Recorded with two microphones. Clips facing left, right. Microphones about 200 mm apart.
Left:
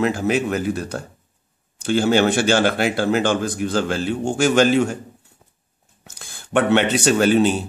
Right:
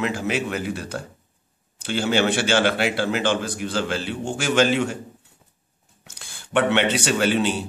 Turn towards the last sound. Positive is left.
turn(degrees=45)  # may be behind; listen again after turning